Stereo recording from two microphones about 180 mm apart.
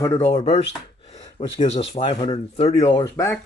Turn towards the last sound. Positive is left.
turn(degrees=15)  # may be behind; listen again after turning